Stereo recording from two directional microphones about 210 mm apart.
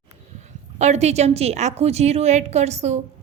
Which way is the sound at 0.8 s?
30° right (ahead or behind).